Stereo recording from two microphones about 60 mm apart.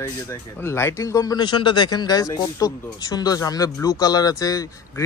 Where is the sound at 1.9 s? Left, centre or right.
Left.